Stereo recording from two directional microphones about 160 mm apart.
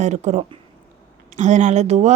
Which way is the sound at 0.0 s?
45° right (ahead or behind).